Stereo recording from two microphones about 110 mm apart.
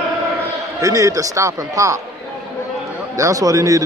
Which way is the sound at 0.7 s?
30° right (ahead or behind).